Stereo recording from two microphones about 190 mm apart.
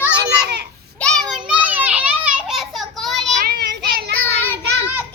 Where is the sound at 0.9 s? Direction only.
5° left (ahead or behind).